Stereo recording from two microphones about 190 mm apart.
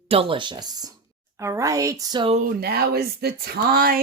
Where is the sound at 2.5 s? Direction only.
55° right (ahead or behind).